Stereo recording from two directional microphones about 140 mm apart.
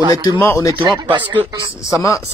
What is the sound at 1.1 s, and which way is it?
Speech, 35° right (ahead or behind).